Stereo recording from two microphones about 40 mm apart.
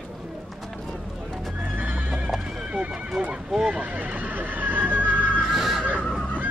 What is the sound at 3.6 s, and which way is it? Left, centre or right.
Neigh, right.